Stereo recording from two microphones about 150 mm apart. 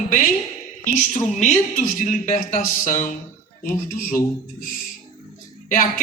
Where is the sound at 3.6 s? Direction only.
70° left (ahead or behind).